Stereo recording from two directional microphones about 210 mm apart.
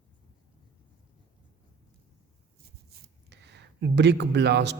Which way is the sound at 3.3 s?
55° right (ahead or behind).